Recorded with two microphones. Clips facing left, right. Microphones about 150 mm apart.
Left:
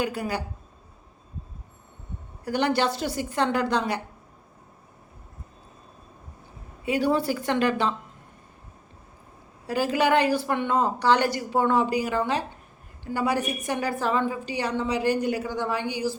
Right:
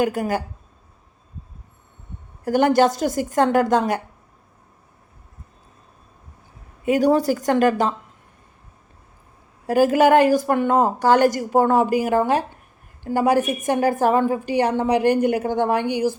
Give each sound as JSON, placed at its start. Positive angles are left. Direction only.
{"t": 0.0, "sound": "a woman's voice", "side_deg": -45}
{"t": 2.4, "sound": "a woman's voice", "side_deg": -45}
{"t": 6.8, "sound": "a woman's voice", "side_deg": -45}
{"t": 9.6, "sound": "a woman's voice", "side_deg": -50}